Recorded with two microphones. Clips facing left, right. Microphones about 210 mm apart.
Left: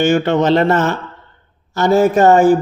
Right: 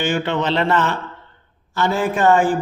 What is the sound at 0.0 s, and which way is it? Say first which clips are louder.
Speech: left 7 dB; 45° left (ahead or behind).